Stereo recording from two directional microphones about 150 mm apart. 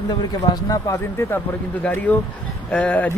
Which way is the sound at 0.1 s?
25° left (ahead or behind).